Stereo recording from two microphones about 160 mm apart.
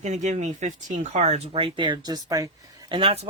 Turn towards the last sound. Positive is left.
turn(degrees=-35)  # may be behind; listen again after turning